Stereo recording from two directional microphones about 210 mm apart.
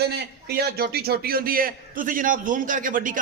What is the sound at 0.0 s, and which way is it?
A man's voice, 50° right (ahead or behind).